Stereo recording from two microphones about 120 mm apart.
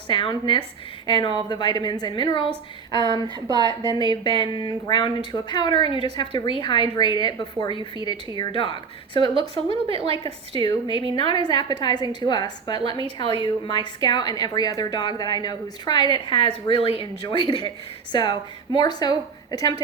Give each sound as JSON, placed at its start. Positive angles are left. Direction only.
{"t": 0.1, "sound": "a woman's voice", "side_deg": 40}
{"t": 2.9, "sound": "speech", "side_deg": -40}
{"t": 3.9, "sound": "a woman's voice", "side_deg": 35}
{"t": 9.6, "sound": "a woman's voice", "side_deg": -50}
{"t": 11.1, "sound": "a woman's voice", "side_deg": 40}